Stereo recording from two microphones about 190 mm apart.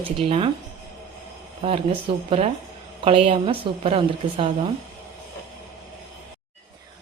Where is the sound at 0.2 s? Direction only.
30° right (ahead or behind).